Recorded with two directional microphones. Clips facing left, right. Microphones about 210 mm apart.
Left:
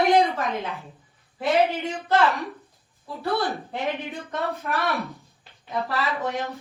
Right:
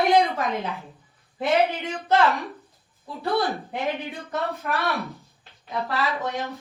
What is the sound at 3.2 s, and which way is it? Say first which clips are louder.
Speech: right 1 dB; 15° right (ahead or behind).